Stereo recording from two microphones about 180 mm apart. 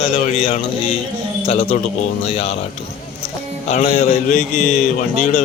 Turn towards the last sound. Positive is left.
turn(degrees=45)  # may be behind; listen again after turning